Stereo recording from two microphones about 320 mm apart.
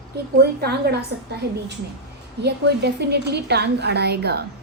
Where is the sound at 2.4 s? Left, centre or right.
Right.